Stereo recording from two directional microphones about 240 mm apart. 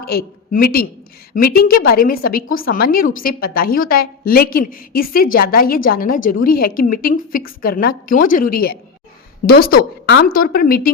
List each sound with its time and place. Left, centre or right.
0.0 s a woman's voice: left